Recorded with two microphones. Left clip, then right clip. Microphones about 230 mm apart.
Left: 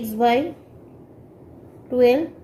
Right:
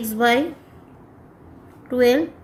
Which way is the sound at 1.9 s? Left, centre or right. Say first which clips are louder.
Even; right.